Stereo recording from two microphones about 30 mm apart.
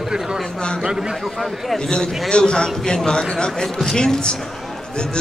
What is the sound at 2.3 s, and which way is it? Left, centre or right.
A man's voice, left.